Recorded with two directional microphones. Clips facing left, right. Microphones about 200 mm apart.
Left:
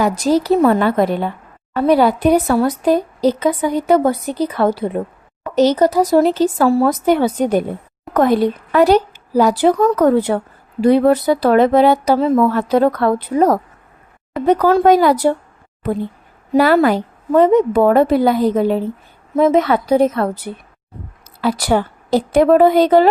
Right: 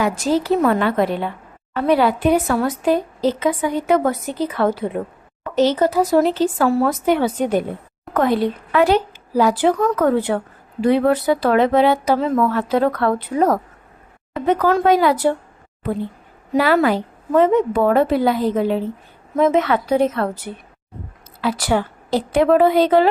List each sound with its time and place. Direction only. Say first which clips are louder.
0.0 s speech: left 3 dB; 40° left (ahead or behind)
16.6 s a woman's voice: left 4 dB; 40° left (ahead or behind)